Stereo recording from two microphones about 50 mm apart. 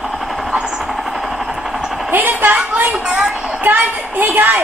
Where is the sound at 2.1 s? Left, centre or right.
Right.